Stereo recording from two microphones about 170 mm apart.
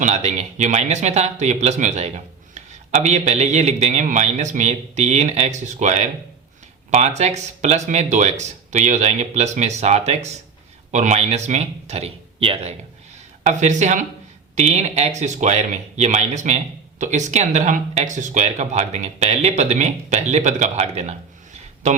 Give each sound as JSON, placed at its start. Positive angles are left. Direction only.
{"t": 0.0, "sound": "speech", "side_deg": -40}